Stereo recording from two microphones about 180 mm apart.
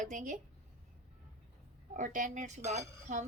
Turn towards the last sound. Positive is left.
turn(degrees=-40)  # may be behind; listen again after turning